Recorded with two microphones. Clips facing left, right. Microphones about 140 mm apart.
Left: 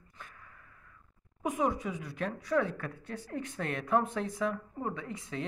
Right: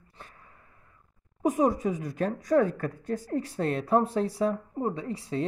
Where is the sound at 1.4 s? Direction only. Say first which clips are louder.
Right 7 dB; 40° right (ahead or behind).